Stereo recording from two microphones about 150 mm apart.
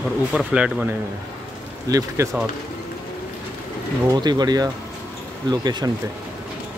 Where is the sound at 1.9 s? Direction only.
25° right (ahead or behind).